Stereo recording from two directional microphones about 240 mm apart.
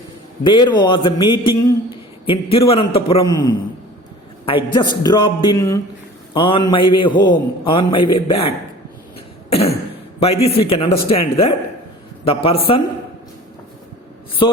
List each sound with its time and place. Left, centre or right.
0.4 s a man's voice: centre
9.5 s a sound: left
10.2 s a man's voice: left
14.4 s speech: centre